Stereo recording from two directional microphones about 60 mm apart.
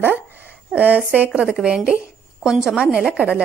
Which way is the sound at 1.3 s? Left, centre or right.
Centre.